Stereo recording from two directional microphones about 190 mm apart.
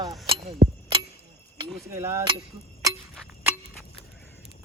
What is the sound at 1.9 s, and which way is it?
Speech, 15° right (ahead or behind).